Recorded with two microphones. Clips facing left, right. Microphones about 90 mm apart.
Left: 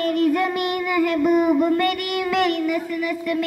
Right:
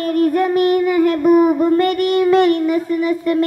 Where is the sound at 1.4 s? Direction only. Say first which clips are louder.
Right 4 dB; 35° right (ahead or behind).